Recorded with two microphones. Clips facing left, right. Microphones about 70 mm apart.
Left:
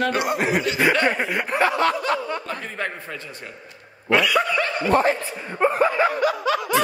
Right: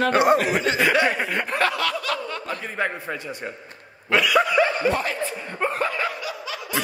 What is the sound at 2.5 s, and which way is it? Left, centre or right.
Speech, centre.